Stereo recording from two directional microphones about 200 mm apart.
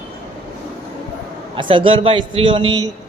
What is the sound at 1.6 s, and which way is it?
A man's voice, 25° right (ahead or behind).